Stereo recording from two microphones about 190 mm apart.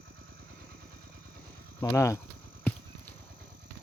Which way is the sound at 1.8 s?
15° left (ahead or behind).